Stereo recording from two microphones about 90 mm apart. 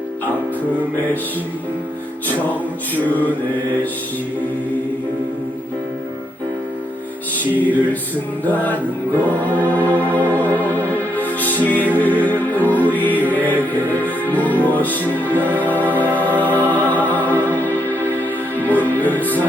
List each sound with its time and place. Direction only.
2.9 s music: 20° left (ahead or behind)
7.5 s music: 20° left (ahead or behind)